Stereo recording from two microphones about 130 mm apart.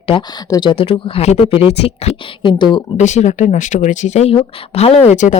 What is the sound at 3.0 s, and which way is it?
Speech, 65° left (ahead or behind).